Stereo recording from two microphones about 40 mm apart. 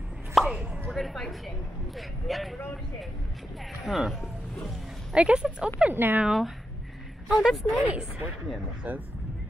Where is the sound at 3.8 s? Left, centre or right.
Centre.